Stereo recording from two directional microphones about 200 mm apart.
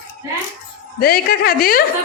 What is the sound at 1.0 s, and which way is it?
Speech, 50° left (ahead or behind).